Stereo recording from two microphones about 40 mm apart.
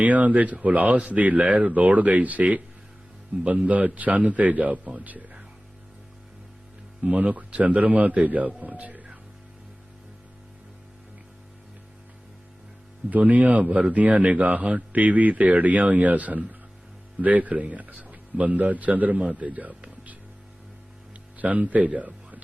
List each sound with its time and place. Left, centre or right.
0.0 s speech: right
7.0 s speech: right
13.1 s a man's voice: right
21.3 s speech: right